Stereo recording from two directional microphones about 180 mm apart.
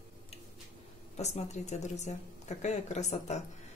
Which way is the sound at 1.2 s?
40° left (ahead or behind).